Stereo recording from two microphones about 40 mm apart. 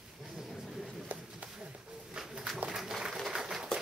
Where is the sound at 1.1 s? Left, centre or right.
Right.